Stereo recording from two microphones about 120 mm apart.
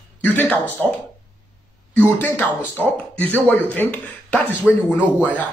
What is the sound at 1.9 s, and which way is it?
Speech, 15° left (ahead or behind).